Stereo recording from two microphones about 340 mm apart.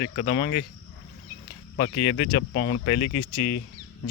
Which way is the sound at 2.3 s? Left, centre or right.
Left.